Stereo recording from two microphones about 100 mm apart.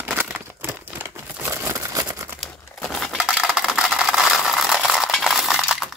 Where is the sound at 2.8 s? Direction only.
Centre (ahead or behind).